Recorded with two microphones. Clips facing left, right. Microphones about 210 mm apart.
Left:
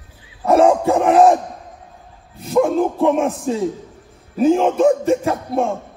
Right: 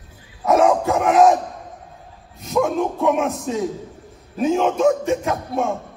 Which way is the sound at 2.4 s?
30° left (ahead or behind).